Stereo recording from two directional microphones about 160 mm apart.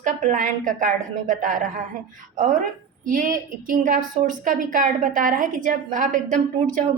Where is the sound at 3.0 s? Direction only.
60° right (ahead or behind).